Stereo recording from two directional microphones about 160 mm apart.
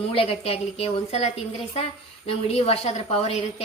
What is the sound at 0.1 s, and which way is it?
A woman's voice, 35° left (ahead or behind).